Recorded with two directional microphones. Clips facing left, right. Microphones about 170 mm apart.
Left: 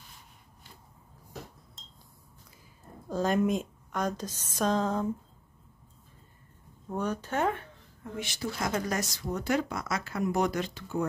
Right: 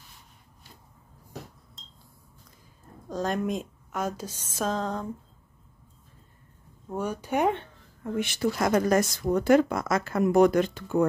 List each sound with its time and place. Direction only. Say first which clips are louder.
3.1 s a woman's voice: left 2 dB; centre (ahead or behind)
4.6 s a sound: left 1 dB; centre (ahead or behind)
6.9 s speech: right 2 dB; 10° right (ahead or behind)
8.0 s speech: right 8 dB; 60° right (ahead or behind)